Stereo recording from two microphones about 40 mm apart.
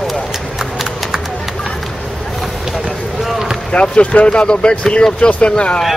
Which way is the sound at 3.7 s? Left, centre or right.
Left.